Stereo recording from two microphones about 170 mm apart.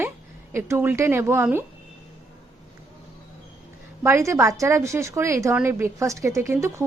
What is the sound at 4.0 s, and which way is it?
A woman's voice, 15° right (ahead or behind).